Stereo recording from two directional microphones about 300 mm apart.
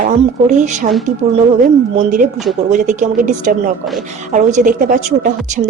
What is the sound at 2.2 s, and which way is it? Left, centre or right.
A woman's voice, right.